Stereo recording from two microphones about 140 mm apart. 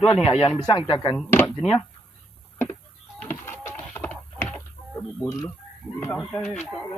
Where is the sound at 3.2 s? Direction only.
20° left (ahead or behind).